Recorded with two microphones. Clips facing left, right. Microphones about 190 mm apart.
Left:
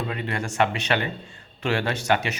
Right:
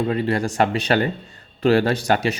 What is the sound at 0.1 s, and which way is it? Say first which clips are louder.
Speech: right 8 dB; 35° right (ahead or behind).